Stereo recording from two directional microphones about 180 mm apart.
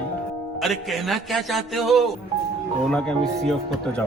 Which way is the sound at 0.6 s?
Centre (ahead or behind).